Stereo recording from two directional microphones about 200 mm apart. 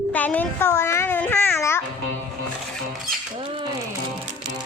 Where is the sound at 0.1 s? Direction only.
10° left (ahead or behind).